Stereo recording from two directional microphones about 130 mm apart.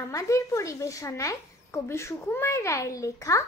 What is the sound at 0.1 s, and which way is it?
A woman's voice, 25° left (ahead or behind).